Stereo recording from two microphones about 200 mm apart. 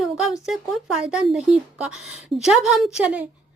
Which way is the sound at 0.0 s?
Centre (ahead or behind).